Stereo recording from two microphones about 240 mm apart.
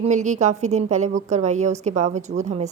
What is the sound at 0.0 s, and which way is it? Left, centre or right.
A woman's voice, right.